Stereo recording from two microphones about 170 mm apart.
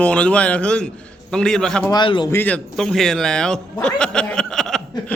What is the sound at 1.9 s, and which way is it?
Speech, 25° left (ahead or behind).